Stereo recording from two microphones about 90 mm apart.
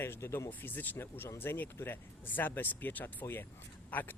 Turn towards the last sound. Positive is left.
turn(degrees=20)  # may be behind; listen again after turning